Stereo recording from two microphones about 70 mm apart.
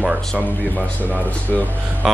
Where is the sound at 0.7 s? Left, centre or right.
Left.